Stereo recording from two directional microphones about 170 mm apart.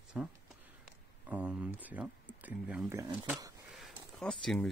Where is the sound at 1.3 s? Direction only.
10° right (ahead or behind).